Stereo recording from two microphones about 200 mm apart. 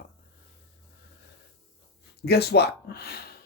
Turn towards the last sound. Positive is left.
turn(degrees=50)  # may be behind; listen again after turning